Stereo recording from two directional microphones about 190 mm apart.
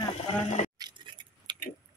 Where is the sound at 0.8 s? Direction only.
25° right (ahead or behind).